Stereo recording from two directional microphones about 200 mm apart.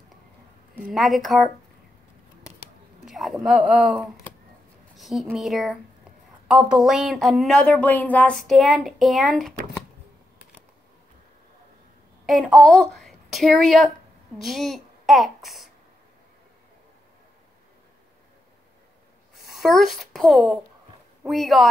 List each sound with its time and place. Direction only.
0.7 s speech: 5° right (ahead or behind)
3.1 s speech: centre (ahead or behind)
12.3 s a woman's voice: centre (ahead or behind)
19.3 s speech: centre (ahead or behind)